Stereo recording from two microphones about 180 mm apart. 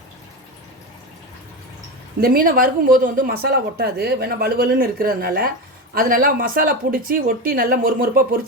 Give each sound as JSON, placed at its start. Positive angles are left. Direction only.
{"t": 2.2, "sound": "speech", "side_deg": -55}